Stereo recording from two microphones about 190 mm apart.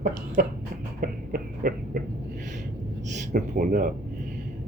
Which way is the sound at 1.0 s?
50° right (ahead or behind).